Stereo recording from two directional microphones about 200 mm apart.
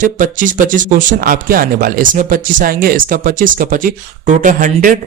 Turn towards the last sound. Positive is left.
turn(degrees=-40)  # may be behind; listen again after turning